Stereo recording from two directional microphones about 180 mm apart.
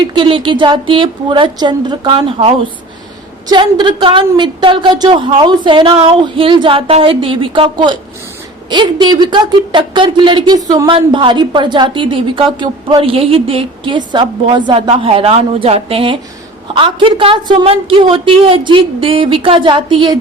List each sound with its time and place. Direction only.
0.0 s a woman's voice: 25° right (ahead or behind)
3.5 s a woman's voice: 25° right (ahead or behind)